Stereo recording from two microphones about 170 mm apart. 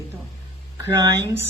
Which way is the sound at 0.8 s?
20° right (ahead or behind).